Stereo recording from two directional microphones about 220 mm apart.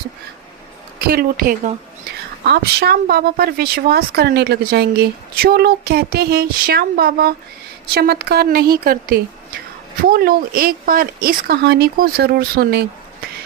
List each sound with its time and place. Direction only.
0.9 s speech: 45° right (ahead or behind)